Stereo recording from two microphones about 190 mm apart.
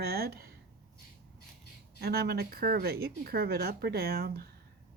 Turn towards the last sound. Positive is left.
turn(degrees=-55)  # may be behind; listen again after turning